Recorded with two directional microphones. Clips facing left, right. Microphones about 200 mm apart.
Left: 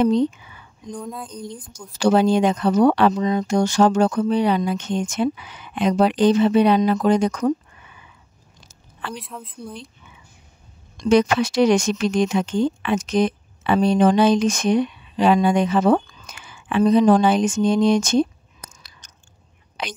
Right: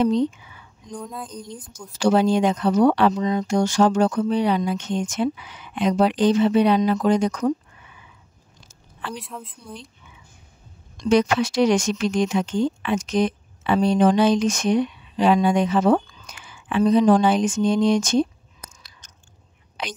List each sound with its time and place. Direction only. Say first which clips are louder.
0.9 s a woman's voice: even; centre (ahead or behind)
2.0 s speech: left 2 dB; 60° left (ahead or behind)
9.1 s a woman's voice: even; centre (ahead or behind)
11.1 s speech: left 2 dB; 60° left (ahead or behind)